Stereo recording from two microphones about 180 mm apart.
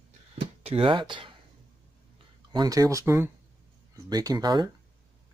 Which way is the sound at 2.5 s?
20° right (ahead or behind).